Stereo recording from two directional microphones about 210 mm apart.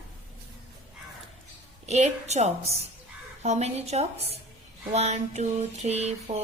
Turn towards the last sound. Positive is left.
turn(degrees=-30)  # may be behind; listen again after turning